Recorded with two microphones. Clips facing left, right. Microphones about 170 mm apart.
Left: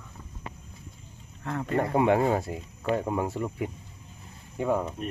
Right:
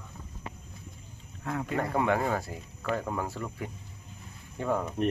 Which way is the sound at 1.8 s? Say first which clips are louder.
Left 5 dB; 20° left (ahead or behind).